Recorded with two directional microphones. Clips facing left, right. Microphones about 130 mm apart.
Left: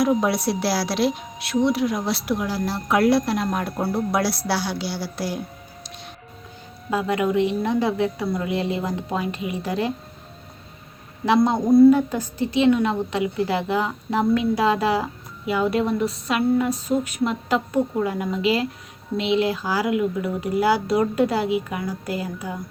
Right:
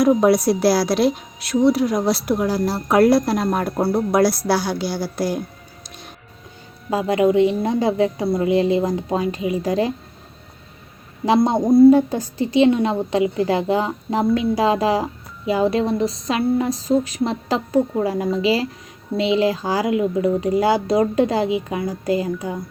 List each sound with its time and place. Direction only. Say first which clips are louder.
0.0 s a woman's voice: right 5 dB; 45° right (ahead or behind)
6.9 s a woman's voice: right 5 dB; 30° right (ahead or behind)
11.3 s a woman's voice: right 2 dB; 30° right (ahead or behind)